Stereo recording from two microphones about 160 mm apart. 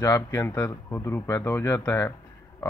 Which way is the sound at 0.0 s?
20° left (ahead or behind).